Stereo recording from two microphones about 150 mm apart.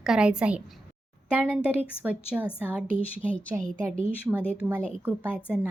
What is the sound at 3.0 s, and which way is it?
Speech, 10° left (ahead or behind).